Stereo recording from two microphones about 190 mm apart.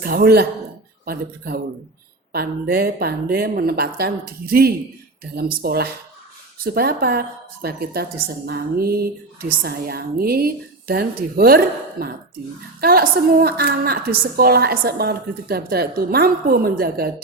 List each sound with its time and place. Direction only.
0.0 s a woman's voice: 55° right (ahead or behind)